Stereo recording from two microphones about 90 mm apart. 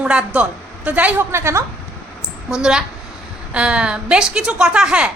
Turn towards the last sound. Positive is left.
turn(degrees=-10)  # may be behind; listen again after turning